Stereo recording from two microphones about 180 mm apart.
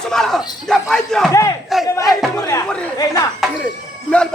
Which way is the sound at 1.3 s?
15° left (ahead or behind).